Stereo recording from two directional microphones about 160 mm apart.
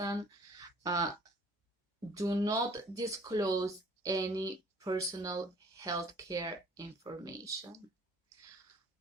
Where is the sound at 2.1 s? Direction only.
20° right (ahead or behind).